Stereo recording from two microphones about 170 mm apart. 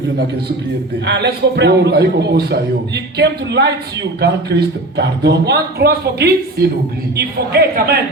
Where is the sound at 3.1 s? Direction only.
90° right; by 8.0 s 65° right (ahead or behind).